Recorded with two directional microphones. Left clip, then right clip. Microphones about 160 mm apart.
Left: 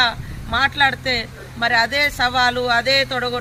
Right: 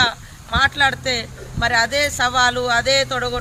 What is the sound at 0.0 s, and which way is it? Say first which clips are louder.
Speech: even; 10° right (ahead or behind).